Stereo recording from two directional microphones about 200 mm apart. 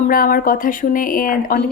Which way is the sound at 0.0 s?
45° left (ahead or behind).